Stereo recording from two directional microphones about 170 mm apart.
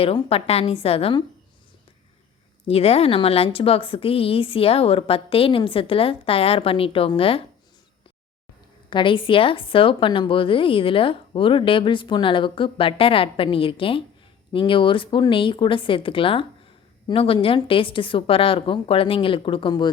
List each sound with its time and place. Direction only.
0.0 s a woman's voice: 35° left (ahead or behind)
2.6 s a woman's voice: 35° left (ahead or behind)
8.9 s a woman's voice: 30° left (ahead or behind)